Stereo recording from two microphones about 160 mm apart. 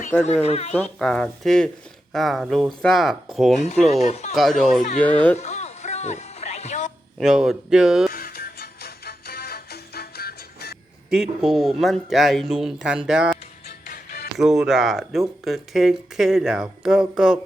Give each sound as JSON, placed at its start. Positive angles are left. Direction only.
{"t": 0.4, "sound": "speech", "side_deg": 40}
{"t": 0.7, "sound": "speech", "side_deg": 5}
{"t": 3.6, "sound": "speech", "side_deg": 45}
{"t": 4.4, "sound": "speech", "side_deg": 0}
{"t": 4.9, "sound": "speech", "side_deg": 10}
{"t": 5.4, "sound": "music", "side_deg": 45}
{"t": 7.2, "sound": "speech", "side_deg": -5}
{"t": 8.1, "sound": "music", "side_deg": 75}
{"t": 11.1, "sound": "speech", "side_deg": -5}
{"t": 13.8, "sound": "music", "side_deg": 70}
{"t": 14.3, "sound": "speech", "side_deg": -5}